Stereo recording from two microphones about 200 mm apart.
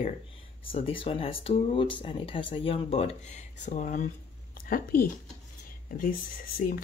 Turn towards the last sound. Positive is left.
turn(degrees=45)  # may be behind; listen again after turning